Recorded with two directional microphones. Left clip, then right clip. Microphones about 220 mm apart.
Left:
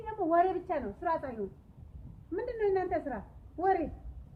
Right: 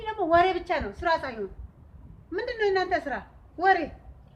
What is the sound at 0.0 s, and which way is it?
A woman's voice, 10° left (ahead or behind).